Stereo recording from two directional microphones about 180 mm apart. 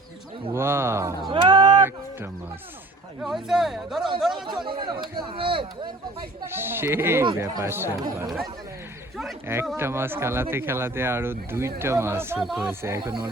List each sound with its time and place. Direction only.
0.5 s speech: 15° right (ahead or behind)
1.3 s a sound: 25° right (ahead or behind)
3.2 s speech: centre (ahead or behind)
4.4 s speech: 25° right (ahead or behind)
6.4 s speech: 10° right (ahead or behind)
9.7 s speech: 15° right (ahead or behind)
12.5 s speech: centre (ahead or behind)
12.8 s speech: 20° right (ahead or behind)